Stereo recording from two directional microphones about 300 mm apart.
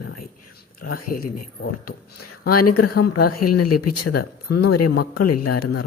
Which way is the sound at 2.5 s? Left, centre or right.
Left.